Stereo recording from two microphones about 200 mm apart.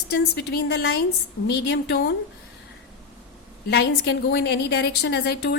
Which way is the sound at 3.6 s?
55° left (ahead or behind).